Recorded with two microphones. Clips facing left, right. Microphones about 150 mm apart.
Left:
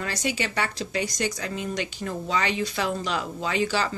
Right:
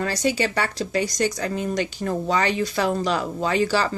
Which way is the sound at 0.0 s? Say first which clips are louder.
Right 6 dB; 35° right (ahead or behind).